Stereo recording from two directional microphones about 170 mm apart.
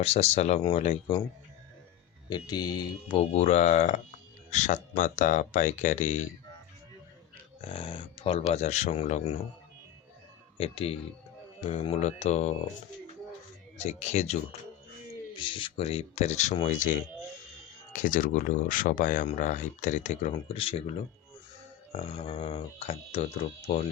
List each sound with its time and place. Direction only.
0.0 s speech: 35° left (ahead or behind)
2.3 s mantra: 25° left (ahead or behind)
3.2 s speech: 40° left (ahead or behind)
7.6 s speech: 30° left (ahead or behind)
10.6 s speech: 35° left (ahead or behind)
13.7 s speech: 40° left (ahead or behind)
15.4 s speech: 30° left (ahead or behind); by 16.9 s 45° left (ahead or behind)
17.9 s speech: 50° left (ahead or behind)
20.5 s speech: 35° left (ahead or behind)
21.9 s speech: 35° left (ahead or behind)